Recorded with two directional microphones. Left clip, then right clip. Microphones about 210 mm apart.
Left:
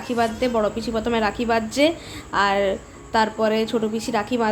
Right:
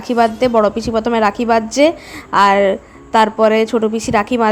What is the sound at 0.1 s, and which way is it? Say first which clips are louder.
A woman's voice: right 9 dB; 35° right (ahead or behind).